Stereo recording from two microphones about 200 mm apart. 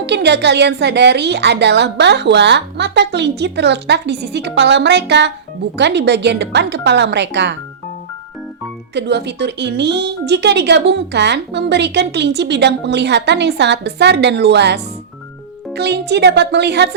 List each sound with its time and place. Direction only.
0.0 s speech: 60° right (ahead or behind)
9.0 s speech: 60° right (ahead or behind)